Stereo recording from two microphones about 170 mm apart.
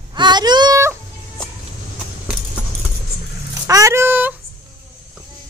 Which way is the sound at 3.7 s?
15° right (ahead or behind).